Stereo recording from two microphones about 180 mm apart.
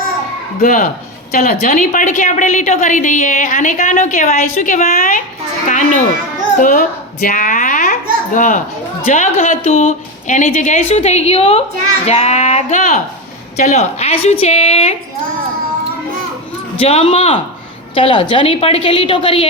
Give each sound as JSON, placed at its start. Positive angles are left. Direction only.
{"t": 0.6, "sound": "a woman's voice", "side_deg": 45}
{"t": 16.7, "sound": "a woman's voice", "side_deg": 30}